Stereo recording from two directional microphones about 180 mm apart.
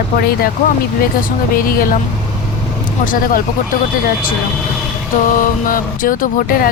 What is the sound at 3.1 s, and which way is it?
Speech, 50° left (ahead or behind).